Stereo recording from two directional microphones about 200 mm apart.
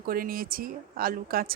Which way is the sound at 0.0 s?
45° right (ahead or behind).